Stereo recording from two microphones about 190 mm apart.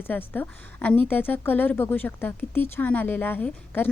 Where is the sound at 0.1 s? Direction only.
10° left (ahead or behind).